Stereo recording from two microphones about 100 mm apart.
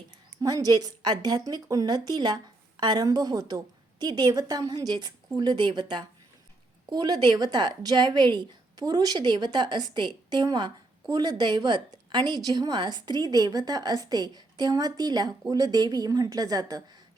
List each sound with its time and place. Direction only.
0.4 s a woman's voice: 40° right (ahead or behind)